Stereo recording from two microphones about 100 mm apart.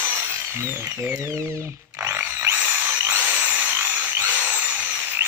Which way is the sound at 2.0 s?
25° right (ahead or behind).